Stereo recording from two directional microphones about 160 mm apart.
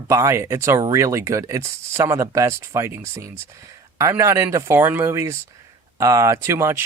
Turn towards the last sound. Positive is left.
turn(degrees=-15)  # may be behind; listen again after turning